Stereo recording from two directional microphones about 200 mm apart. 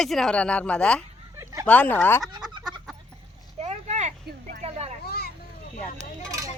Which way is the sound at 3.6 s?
35° right (ahead or behind).